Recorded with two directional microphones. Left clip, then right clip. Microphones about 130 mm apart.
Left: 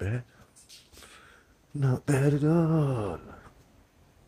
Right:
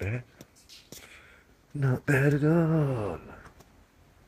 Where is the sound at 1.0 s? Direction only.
55° left (ahead or behind).